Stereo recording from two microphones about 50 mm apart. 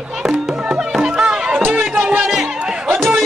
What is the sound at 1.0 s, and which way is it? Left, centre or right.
Music, centre.